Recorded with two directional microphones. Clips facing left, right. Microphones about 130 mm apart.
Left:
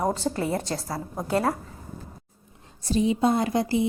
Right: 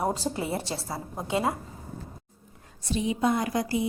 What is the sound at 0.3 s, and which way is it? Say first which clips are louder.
Speech: left 3 dB; 5° right (ahead or behind).